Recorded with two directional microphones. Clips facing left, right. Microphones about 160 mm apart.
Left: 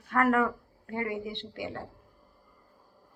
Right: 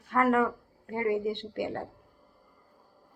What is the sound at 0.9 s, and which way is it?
Speech, 35° right (ahead or behind).